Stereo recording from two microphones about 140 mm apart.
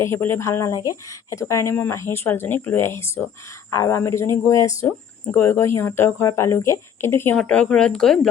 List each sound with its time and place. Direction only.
0.0 s speech: 20° left (ahead or behind); by 8.3 s 5° left (ahead or behind)